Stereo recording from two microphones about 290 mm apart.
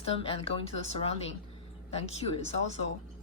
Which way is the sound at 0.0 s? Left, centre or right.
Centre.